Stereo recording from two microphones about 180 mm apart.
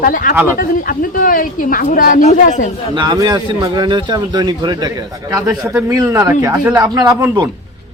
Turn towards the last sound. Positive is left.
turn(degrees=-20)  # may be behind; listen again after turning